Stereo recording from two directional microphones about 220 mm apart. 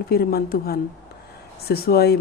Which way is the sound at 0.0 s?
45° left (ahead or behind).